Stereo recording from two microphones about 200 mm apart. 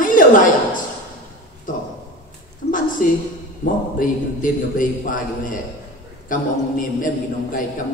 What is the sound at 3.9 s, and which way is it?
A man's voice, 40° left (ahead or behind).